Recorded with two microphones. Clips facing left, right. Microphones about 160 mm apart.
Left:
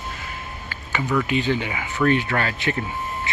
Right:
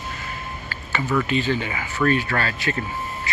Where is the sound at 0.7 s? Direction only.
15° left (ahead or behind).